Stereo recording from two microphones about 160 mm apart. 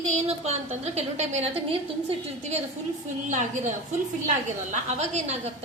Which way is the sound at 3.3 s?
50° right (ahead or behind).